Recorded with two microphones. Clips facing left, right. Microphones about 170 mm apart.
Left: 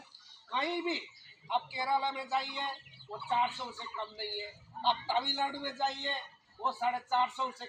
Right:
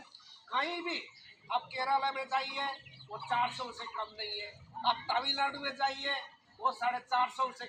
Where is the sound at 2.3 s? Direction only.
15° right (ahead or behind).